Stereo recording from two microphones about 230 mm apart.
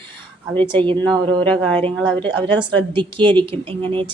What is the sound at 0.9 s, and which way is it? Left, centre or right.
Speech, right.